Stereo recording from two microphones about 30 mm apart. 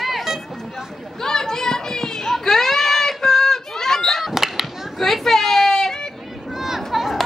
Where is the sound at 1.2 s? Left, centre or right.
Centre.